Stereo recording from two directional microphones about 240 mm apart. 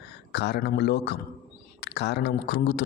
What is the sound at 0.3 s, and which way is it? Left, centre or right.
Speech, left.